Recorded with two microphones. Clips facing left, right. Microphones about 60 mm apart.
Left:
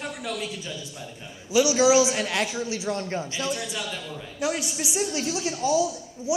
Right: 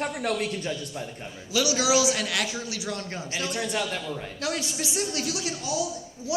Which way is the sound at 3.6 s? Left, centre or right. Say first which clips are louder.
Right 4 dB; right.